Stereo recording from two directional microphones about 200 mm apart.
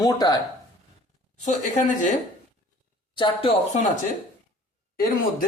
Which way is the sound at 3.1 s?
25° left (ahead or behind).